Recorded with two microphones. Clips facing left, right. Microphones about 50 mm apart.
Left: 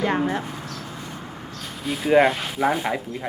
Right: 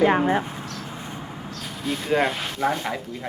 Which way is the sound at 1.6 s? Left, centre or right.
Centre.